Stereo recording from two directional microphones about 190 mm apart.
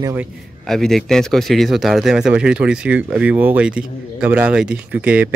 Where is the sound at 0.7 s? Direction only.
Centre (ahead or behind).